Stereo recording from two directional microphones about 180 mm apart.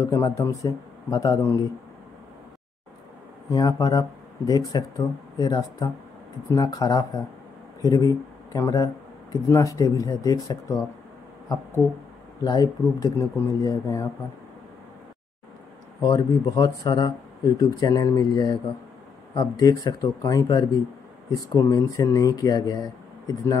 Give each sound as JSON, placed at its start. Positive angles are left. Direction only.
{"t": 0.0, "sound": "speech", "side_deg": 20}
{"t": 3.4, "sound": "speech", "side_deg": 20}
{"t": 12.4, "sound": "speech", "side_deg": 20}
{"t": 16.0, "sound": "speech", "side_deg": 25}